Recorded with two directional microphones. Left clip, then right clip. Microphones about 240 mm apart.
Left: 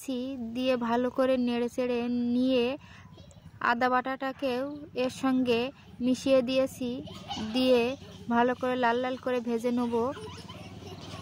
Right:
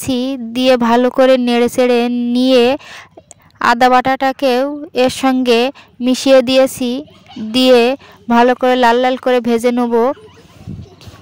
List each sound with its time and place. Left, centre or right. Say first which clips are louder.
0.0 s a woman's voice: right 16 dB; right